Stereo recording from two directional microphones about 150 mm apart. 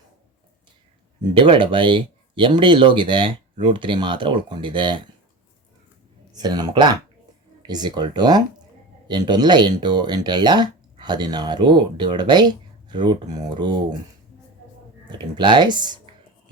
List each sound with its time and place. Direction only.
1.2 s speech: 35° right (ahead or behind)
6.3 s speech: 25° right (ahead or behind)
15.2 s speech: 30° right (ahead or behind)